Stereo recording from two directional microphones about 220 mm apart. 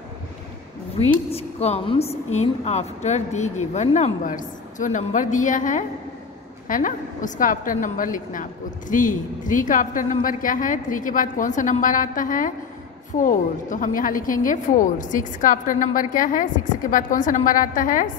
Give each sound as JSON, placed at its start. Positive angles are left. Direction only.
{"t": 0.9, "sound": "a woman's voice", "side_deg": 30}